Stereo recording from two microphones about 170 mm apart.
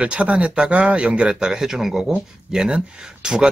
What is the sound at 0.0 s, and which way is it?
Speech, 5° right (ahead or behind).